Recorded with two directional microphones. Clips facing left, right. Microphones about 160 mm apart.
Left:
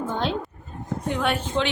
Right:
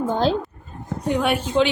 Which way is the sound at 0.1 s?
35° right (ahead or behind).